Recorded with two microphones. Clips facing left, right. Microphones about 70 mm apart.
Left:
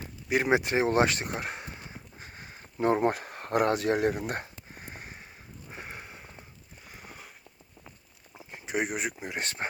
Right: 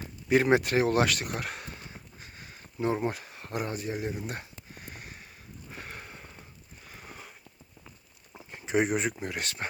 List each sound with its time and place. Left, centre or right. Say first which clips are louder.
0.3 s speech: right 2 dB; centre
0.6 s speech: left 1 dB; left
2.1 s crow: left 2 dB; left
2.8 s speech: left 4 dB; left
3.7 s speech: left 8 dB; left
4.7 s a sound: right 1 dB; left
5.6 s sniff: left 1 dB; centre
6.8 s a sound: right 1 dB; centre
8.4 s a sound: right 4 dB; centre
9.4 s speech: left 2 dB; left